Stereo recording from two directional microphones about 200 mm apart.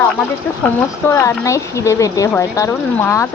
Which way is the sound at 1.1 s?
15° left (ahead or behind).